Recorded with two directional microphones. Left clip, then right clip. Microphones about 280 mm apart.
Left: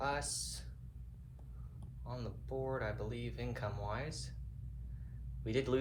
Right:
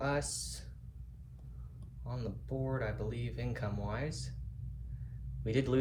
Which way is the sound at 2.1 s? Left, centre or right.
Left.